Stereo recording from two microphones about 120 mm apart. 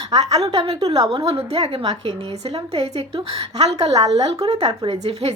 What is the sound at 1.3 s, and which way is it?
Speech, 55° right (ahead or behind).